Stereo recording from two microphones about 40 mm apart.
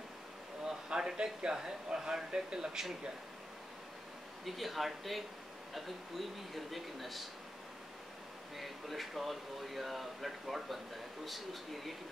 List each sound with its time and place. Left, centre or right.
0.7 s speech: centre
4.5 s speech: centre
8.5 s speech: centre